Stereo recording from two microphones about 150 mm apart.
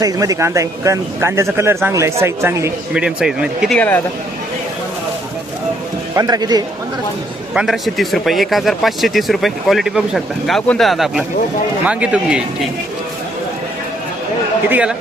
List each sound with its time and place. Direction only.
0.0 s speech: 25° right (ahead or behind)
2.9 s speech: 5° right (ahead or behind)
3.8 s speech: 15° left (ahead or behind)
6.1 s speech: 25° right (ahead or behind)
7.5 s speech: 5° right (ahead or behind)
14.7 s speech: 10° right (ahead or behind)